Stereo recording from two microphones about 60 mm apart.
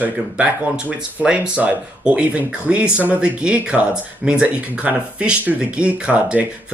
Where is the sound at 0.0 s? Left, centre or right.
Right.